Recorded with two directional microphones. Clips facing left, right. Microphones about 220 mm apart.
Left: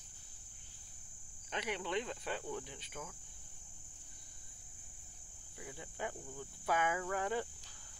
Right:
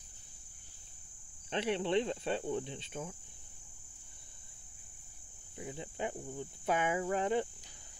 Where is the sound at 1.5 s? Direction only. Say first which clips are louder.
Right 7 dB; 30° right (ahead or behind).